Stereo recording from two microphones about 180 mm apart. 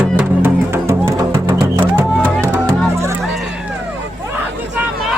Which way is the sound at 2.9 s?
15° right (ahead or behind).